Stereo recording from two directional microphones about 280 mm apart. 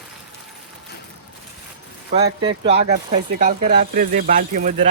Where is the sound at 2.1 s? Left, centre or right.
Centre.